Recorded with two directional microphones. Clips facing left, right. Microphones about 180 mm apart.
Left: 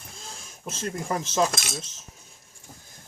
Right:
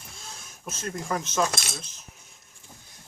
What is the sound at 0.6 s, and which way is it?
Speech, 30° left (ahead or behind).